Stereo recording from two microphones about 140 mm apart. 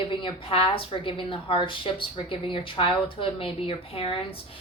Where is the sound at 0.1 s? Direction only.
35° left (ahead or behind).